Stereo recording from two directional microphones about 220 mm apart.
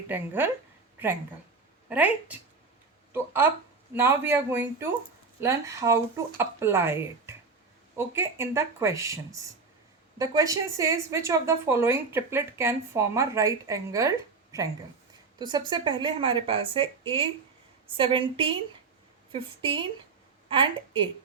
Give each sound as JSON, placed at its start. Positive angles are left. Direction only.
{"t": 0.1, "sound": "a woman's voice", "side_deg": -10}
{"t": 1.9, "sound": "a woman's voice", "side_deg": -5}
{"t": 15.4, "sound": "a woman's voice", "side_deg": -20}